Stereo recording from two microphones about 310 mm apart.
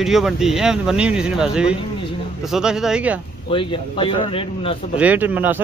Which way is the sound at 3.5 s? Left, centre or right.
Centre.